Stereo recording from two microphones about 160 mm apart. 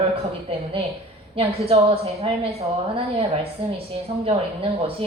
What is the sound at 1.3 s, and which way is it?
A woman's voice, 35° right (ahead or behind).